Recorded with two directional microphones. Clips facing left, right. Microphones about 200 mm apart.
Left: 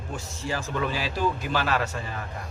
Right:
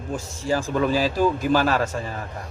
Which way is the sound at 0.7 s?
40° right (ahead or behind).